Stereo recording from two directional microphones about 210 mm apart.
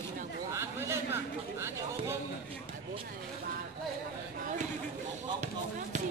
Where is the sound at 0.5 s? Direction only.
10° right (ahead or behind).